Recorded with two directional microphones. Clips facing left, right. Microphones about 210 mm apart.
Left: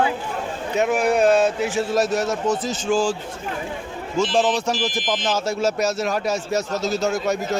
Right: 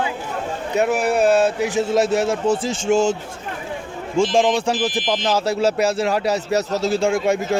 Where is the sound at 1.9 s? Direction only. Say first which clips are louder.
Right 3 dB; 25° right (ahead or behind).